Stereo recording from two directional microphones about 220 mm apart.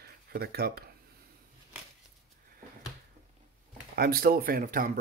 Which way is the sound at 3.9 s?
45° right (ahead or behind).